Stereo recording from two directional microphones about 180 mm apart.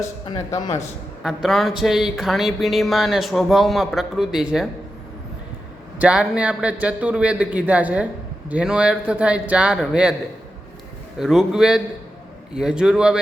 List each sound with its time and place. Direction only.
0.0 s a man's voice: 20° left (ahead or behind)
1.2 s speech: centre (ahead or behind)
6.0 s a man's voice: 5° right (ahead or behind)
11.2 s speech: centre (ahead or behind)